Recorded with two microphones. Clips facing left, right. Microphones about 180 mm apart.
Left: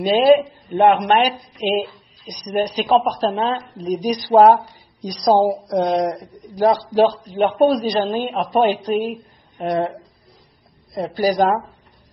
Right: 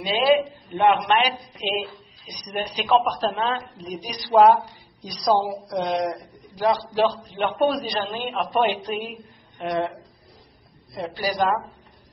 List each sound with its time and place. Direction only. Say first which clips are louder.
0.0 s a man's voice: left 6 dB; 45° left (ahead or behind)
11.0 s speech: left 7 dB; 40° left (ahead or behind)